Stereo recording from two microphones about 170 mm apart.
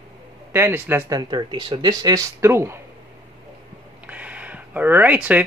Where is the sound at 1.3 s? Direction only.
25° right (ahead or behind).